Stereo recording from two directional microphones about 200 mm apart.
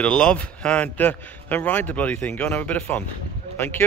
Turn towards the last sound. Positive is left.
turn(degrees=10)  # may be behind; listen again after turning